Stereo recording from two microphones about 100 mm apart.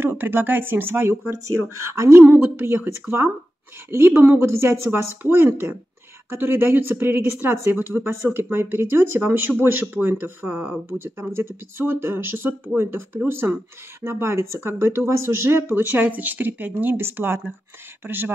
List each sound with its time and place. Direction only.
0.0 s speech: 20° right (ahead or behind)